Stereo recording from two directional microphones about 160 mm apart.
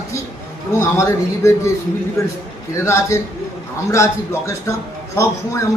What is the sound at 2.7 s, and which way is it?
Speech, 15° left (ahead or behind).